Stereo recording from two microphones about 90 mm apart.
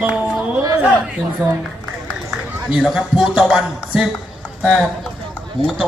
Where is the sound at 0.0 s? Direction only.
15° right (ahead or behind).